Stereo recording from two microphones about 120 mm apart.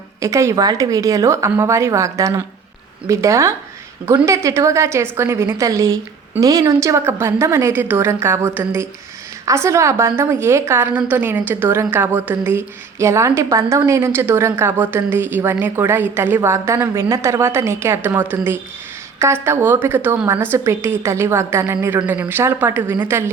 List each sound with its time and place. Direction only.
0.2 s a woman's voice: 25° right (ahead or behind)